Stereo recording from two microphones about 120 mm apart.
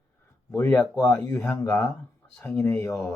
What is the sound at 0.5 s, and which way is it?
Speech, 15° left (ahead or behind).